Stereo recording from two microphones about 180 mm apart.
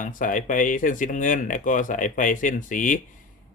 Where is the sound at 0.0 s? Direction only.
50° left (ahead or behind).